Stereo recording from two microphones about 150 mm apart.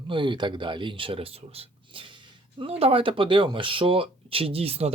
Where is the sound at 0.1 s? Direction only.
30° right (ahead or behind).